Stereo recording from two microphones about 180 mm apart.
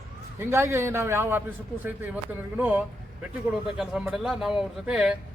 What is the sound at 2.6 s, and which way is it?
Speech, 10° right (ahead or behind).